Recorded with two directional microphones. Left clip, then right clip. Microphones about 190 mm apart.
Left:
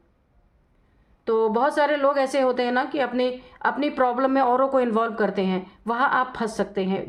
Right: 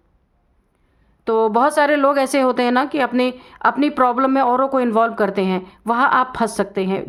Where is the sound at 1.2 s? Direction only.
40° right (ahead or behind).